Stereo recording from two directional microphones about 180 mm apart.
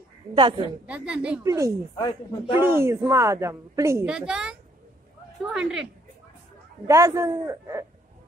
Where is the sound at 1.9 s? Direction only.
25° left (ahead or behind).